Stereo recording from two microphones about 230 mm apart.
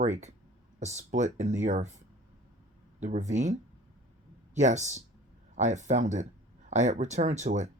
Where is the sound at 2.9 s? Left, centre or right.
Right.